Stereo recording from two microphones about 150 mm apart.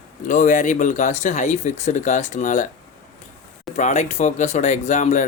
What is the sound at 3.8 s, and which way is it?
Speech, 55° left (ahead or behind).